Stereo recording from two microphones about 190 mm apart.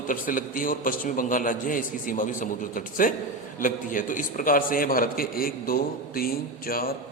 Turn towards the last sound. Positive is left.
turn(degrees=50)  # may be behind; listen again after turning